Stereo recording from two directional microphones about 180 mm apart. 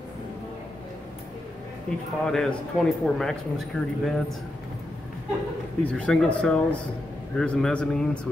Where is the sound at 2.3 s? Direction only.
5° left (ahead or behind).